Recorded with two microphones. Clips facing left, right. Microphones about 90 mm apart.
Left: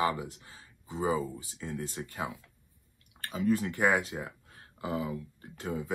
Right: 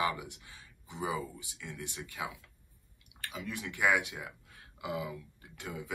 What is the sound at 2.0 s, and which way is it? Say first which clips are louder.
Speech: left 3 dB; 45° left (ahead or behind).